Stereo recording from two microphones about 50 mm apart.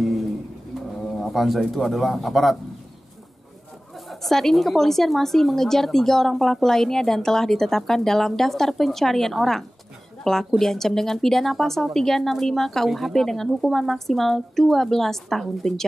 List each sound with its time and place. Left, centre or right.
1.0 s a man's voice: centre
4.1 s a woman's voice: centre